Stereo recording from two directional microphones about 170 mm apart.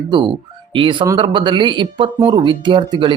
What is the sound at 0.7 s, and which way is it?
Speech, 30° right (ahead or behind).